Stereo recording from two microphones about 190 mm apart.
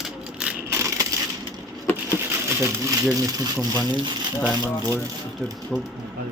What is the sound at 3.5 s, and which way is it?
Speech, 20° right (ahead or behind).